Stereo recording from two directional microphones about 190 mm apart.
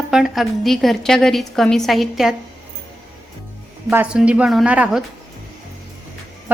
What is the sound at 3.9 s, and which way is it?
A woman's voice, 5° right (ahead or behind).